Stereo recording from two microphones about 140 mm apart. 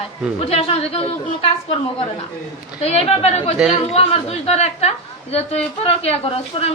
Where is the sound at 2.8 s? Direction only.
45° left (ahead or behind).